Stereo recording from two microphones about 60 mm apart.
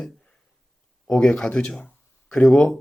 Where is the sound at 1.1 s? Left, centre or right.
Centre.